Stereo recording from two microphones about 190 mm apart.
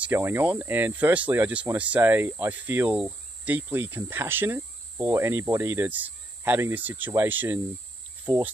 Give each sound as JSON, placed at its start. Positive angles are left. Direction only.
{"t": 0.0, "sound": "speech", "side_deg": -10}
{"t": 8.3, "sound": "speech", "side_deg": -20}